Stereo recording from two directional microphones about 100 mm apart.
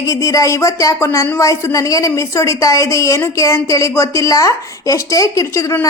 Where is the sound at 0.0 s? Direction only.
35° left (ahead or behind).